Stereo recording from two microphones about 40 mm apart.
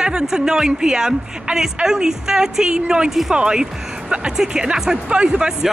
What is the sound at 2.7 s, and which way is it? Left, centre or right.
A woman's voice, right.